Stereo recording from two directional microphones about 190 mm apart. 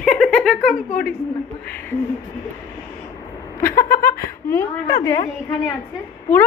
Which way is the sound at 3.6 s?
15° left (ahead or behind).